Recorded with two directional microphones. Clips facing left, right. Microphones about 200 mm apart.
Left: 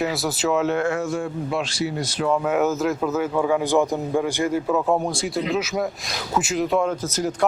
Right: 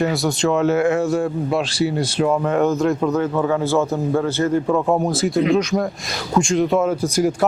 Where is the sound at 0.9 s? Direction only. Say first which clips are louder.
Right 6 dB; 30° right (ahead or behind).